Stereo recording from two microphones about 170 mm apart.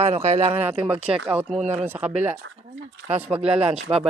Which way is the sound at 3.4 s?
5° right (ahead or behind).